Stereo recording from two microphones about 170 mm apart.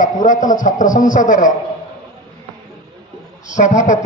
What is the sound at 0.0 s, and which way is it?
A man's voice, 50° left (ahead or behind).